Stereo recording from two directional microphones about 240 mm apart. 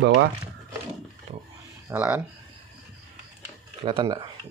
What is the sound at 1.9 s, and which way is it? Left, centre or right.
Speech, centre.